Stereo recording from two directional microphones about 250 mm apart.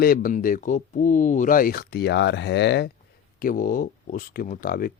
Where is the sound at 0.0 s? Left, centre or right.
Left.